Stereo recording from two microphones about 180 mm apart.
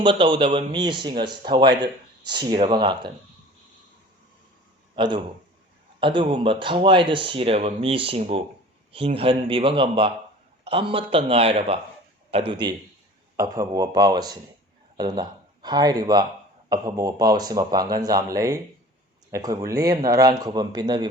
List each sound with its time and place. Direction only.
0.0 s speech: 25° right (ahead or behind)
4.9 s a man's voice: 25° right (ahead or behind)
13.3 s speech: 20° right (ahead or behind)